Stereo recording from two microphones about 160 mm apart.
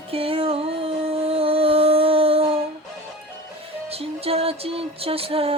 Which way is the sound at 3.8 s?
40° right (ahead or behind).